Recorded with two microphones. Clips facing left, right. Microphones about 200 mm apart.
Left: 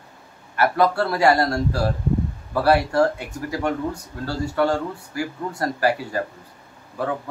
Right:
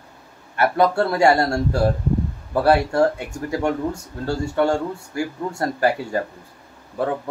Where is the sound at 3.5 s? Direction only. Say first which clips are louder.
Right 2 dB; 25° right (ahead or behind).